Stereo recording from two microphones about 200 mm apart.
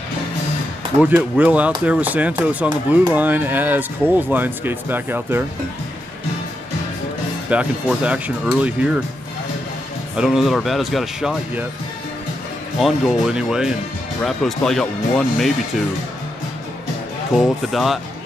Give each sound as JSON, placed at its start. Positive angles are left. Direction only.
{"t": 1.0, "sound": "speech", "side_deg": -10}
{"t": 7.4, "sound": "speech", "side_deg": -5}
{"t": 10.1, "sound": "speech", "side_deg": 0}
{"t": 12.8, "sound": "speech", "side_deg": 0}
{"t": 17.4, "sound": "speech", "side_deg": 0}